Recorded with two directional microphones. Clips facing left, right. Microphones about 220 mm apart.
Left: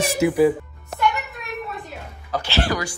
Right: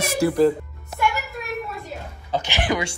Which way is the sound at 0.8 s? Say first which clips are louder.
Left 1 dB; centre (ahead or behind).